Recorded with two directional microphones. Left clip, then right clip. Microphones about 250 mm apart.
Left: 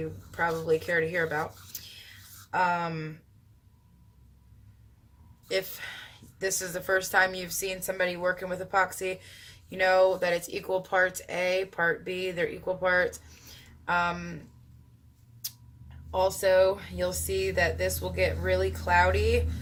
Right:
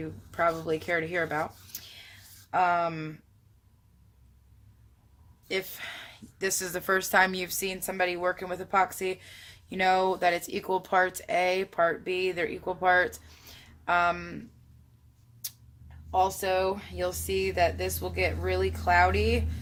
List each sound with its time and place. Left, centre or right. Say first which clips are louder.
0.3 s speech: even; right
5.5 s speech: left 2 dB; right
16.1 s speech: left 3 dB; right